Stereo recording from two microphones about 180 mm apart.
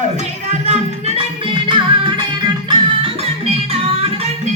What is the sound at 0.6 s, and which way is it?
Music, 35° right (ahead or behind).